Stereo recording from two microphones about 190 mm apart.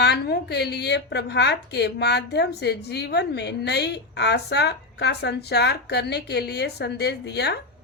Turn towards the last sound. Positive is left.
turn(degrees=60)  # may be behind; listen again after turning